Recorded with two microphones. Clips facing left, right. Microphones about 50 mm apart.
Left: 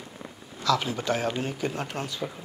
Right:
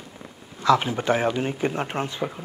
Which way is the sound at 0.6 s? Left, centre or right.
Right.